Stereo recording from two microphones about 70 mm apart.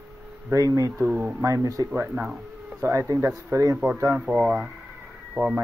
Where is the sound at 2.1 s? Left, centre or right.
Centre.